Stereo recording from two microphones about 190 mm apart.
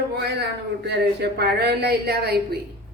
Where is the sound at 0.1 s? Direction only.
60° right (ahead or behind).